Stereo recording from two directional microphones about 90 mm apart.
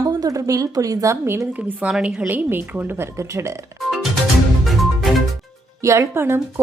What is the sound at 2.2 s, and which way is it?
A woman's voice, 20° right (ahead or behind).